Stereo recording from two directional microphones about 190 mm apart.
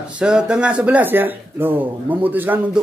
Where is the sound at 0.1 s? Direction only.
5° right (ahead or behind).